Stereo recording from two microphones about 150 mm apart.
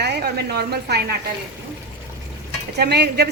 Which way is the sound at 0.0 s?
90° right.